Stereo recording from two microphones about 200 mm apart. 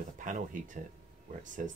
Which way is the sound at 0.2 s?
40° right (ahead or behind).